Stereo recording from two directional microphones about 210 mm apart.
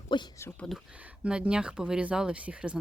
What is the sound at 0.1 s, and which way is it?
Speech, 20° left (ahead or behind).